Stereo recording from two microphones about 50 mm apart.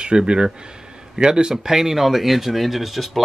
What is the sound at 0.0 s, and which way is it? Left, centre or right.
Speech, centre.